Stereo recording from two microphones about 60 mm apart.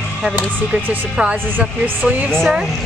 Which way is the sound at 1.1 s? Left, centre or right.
Centre.